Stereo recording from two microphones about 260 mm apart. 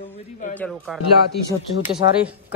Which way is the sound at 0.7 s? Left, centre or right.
Centre.